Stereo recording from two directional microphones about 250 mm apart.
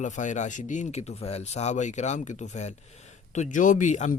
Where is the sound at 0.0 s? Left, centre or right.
Left.